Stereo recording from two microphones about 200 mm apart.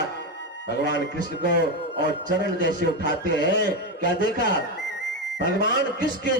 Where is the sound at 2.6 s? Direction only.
60° left (ahead or behind).